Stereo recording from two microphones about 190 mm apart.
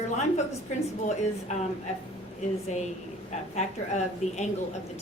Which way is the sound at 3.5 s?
35° left (ahead or behind).